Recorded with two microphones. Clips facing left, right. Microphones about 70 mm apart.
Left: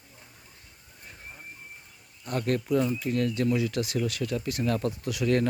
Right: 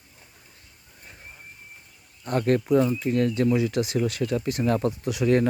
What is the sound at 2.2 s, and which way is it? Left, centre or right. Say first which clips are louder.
Speech: right 5 dB; right.